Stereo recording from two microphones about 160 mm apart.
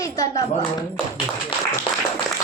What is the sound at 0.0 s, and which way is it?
Speech, 20° left (ahead or behind).